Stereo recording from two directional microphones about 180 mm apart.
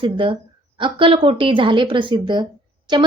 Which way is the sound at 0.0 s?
30° right (ahead or behind).